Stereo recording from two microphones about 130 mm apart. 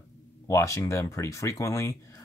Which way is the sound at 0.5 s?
20° left (ahead or behind).